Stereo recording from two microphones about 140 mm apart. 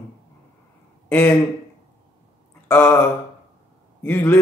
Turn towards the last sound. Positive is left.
turn(degrees=10)  # may be behind; listen again after turning